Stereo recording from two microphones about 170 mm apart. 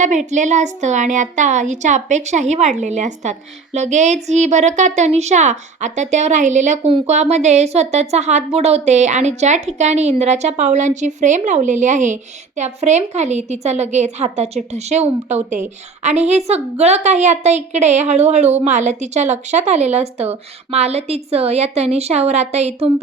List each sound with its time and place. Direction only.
0.3 s a woman's voice: 45° right (ahead or behind)